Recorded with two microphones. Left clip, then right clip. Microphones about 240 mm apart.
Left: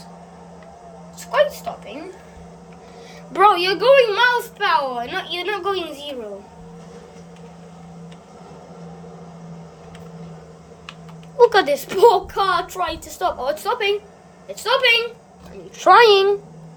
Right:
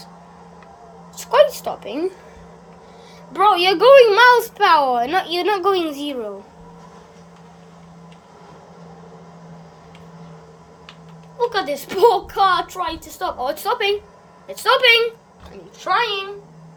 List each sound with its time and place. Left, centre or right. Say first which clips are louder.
1.2 s a woman's voice: right 4 dB; right
3.3 s a woman's voice: left 1 dB; centre
3.6 s a woman's voice: right 4 dB; centre
11.3 s a sound: left 7 dB; centre
11.7 s a woman's voice: left 1 dB; centre
15.8 s a woman's voice: left 9 dB; centre